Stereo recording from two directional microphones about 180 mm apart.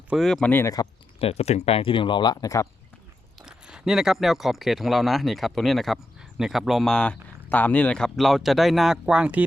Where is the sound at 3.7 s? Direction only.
5° right (ahead or behind).